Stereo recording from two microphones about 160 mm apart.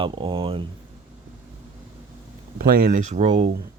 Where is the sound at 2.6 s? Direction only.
65° right (ahead or behind); by 3.5 s 45° right (ahead or behind).